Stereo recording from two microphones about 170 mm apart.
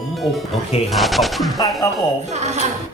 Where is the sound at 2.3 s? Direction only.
40° right (ahead or behind).